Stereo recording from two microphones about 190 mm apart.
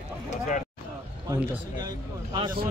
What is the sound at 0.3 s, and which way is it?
Speech, 40° left (ahead or behind).